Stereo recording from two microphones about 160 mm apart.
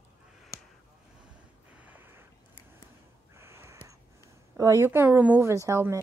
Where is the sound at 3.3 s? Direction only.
15° right (ahead or behind).